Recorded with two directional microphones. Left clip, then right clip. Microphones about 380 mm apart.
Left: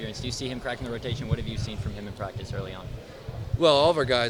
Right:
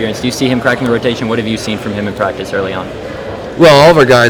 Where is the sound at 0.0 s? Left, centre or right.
Left.